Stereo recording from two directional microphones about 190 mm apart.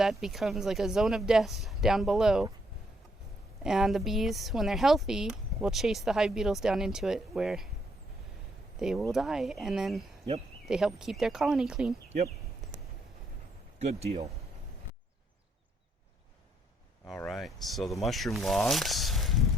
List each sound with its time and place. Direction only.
0.0 s speech: centre (ahead or behind)
3.6 s speech: centre (ahead or behind)
8.8 s speech: centre (ahead or behind)
13.8 s speech: 35° right (ahead or behind)
17.2 s speech: centre (ahead or behind)